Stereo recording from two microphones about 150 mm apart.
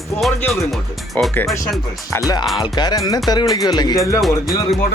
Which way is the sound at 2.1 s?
25° left (ahead or behind).